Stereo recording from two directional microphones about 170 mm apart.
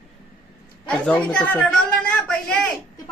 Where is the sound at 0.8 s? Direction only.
5° left (ahead or behind).